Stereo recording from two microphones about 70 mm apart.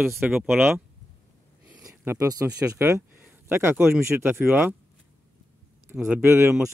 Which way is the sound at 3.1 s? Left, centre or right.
Right.